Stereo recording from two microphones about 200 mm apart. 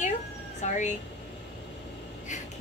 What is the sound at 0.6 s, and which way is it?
Speech, 35° left (ahead or behind).